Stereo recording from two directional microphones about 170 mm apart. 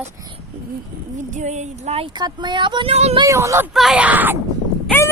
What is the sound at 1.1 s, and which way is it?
Speech, 45° right (ahead or behind).